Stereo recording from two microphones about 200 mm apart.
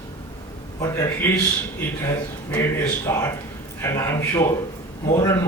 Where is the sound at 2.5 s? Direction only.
10° left (ahead or behind).